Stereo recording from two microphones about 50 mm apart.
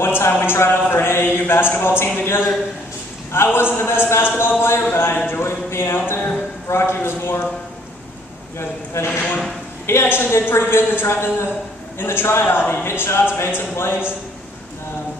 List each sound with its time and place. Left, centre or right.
0.0 s speech: left
8.5 s speech: left